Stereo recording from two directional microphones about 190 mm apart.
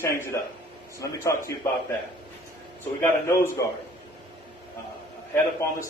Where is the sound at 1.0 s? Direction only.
15° left (ahead or behind).